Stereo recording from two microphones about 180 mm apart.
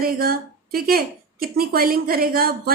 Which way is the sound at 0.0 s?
55° right (ahead or behind).